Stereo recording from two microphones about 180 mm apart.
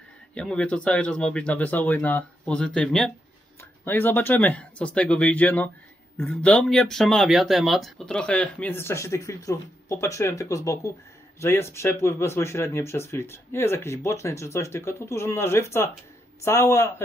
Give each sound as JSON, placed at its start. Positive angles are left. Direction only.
{"t": 0.3, "sound": "speech", "side_deg": 5}